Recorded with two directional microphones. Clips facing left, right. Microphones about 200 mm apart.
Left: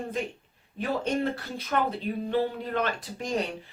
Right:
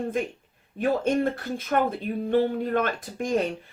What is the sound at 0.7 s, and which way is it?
Speech, 50° right (ahead or behind).